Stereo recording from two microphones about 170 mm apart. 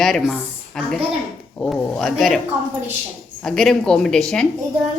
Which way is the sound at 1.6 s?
5° left (ahead or behind).